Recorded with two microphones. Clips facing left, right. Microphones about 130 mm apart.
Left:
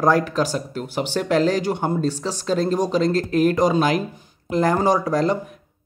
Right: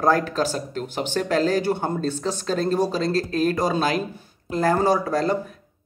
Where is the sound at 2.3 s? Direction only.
15° left (ahead or behind).